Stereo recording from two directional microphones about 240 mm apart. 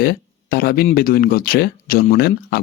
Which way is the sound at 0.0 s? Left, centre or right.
Left.